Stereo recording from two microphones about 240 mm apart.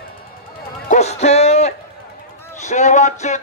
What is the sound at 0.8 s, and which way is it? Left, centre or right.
Music, left.